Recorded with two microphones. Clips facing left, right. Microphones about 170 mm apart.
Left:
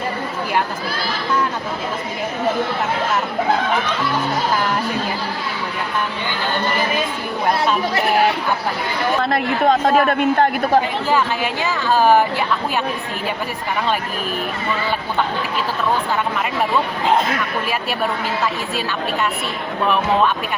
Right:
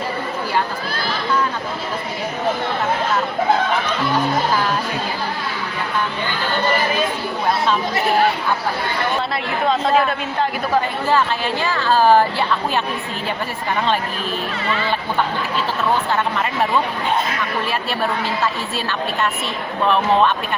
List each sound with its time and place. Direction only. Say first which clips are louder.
9.3 s a woman's voice: left 4 dB; 50° left (ahead or behind)
11.6 s speech: even; 10° left (ahead or behind)